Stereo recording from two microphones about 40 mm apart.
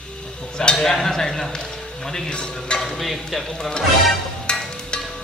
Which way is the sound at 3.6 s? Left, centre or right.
Centre.